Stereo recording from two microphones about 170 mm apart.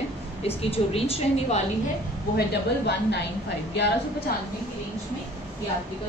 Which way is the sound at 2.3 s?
80° left.